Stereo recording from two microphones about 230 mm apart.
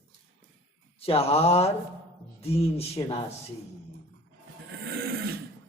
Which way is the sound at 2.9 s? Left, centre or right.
Centre.